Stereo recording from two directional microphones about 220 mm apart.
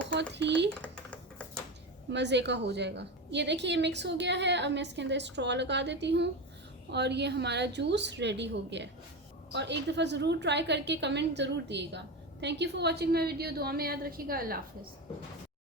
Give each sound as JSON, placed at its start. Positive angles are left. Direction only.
{"t": 0.1, "sound": "speech", "side_deg": -50}
{"t": 0.7, "sound": "typing", "side_deg": 5}
{"t": 2.0, "sound": "a woman's voice", "side_deg": -50}